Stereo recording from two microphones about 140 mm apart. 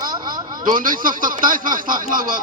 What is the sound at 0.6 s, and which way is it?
Speech, 85° right.